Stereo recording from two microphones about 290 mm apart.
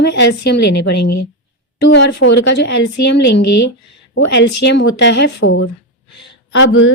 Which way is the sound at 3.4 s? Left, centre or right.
Left.